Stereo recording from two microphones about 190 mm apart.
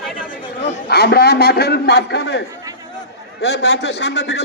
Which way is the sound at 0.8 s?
60° left (ahead or behind).